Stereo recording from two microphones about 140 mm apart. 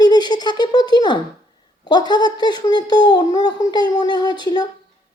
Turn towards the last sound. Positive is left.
turn(degrees=30)  # may be behind; listen again after turning